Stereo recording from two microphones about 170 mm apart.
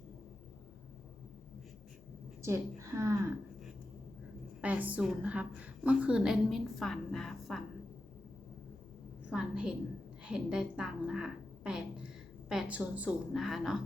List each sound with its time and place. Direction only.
2.4 s a woman's voice: 15° right (ahead or behind)
4.6 s a woman's voice: 10° right (ahead or behind)
9.3 s a sound: 5° right (ahead or behind)
10.2 s a woman's voice: 5° right (ahead or behind)